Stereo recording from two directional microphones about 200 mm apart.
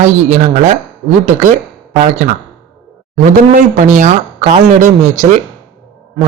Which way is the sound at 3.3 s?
40° right (ahead or behind).